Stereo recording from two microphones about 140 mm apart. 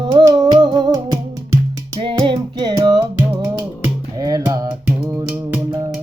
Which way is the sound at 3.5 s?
15° right (ahead or behind).